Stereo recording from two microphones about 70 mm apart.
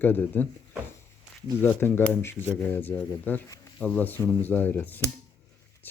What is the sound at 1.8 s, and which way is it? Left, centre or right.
Speech, left.